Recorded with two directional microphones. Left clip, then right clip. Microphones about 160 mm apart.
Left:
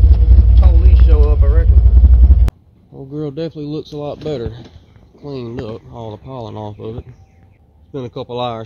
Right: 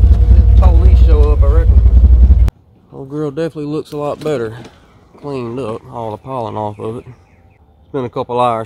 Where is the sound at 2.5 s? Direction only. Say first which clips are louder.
Right 1 dB; centre (ahead or behind).